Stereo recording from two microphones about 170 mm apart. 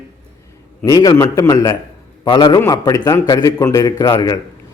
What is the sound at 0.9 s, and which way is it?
A man's voice, 20° left (ahead or behind).